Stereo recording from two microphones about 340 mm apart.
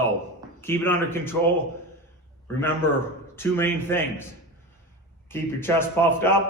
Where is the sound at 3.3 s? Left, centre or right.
Centre.